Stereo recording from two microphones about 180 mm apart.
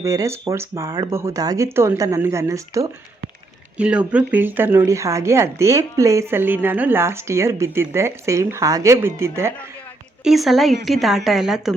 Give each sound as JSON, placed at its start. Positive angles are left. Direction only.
{"t": 0.0, "sound": "a woman's voice", "side_deg": -20}
{"t": 3.8, "sound": "a woman's voice", "side_deg": -5}
{"t": 10.2, "sound": "speech", "side_deg": 0}